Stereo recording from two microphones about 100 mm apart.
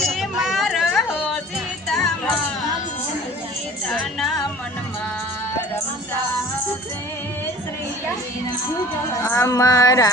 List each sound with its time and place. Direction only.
0.1 s a sound: 5° right (ahead or behind)
3.8 s music: 5° left (ahead or behind)
9.2 s speech: 30° left (ahead or behind)